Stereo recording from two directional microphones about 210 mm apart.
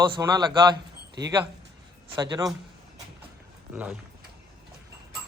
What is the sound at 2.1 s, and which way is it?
Speech, 20° right (ahead or behind).